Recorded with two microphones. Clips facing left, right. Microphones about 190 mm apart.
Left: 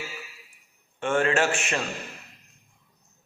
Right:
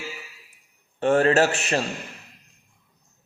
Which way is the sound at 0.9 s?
40° right (ahead or behind).